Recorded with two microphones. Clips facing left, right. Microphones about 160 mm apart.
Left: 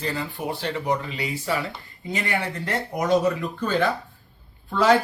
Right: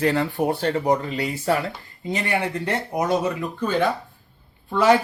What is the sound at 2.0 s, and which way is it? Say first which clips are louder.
Speech: right 3 dB; 30° right (ahead or behind).